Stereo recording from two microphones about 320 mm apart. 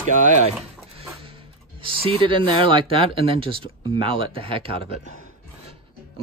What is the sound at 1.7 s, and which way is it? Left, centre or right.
Speech, centre.